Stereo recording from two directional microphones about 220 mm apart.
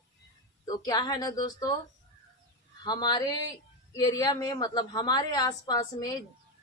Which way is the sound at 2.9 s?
20° left (ahead or behind).